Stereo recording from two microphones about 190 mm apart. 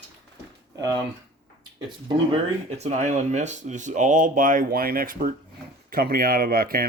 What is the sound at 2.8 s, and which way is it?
Speech, 35° right (ahead or behind).